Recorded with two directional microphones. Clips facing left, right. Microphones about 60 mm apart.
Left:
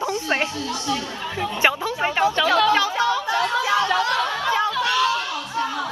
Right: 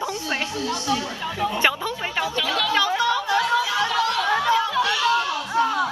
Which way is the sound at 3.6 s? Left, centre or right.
Left.